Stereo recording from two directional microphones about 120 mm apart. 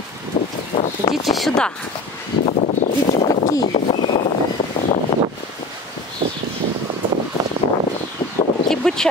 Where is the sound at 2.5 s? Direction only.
75° left (ahead or behind).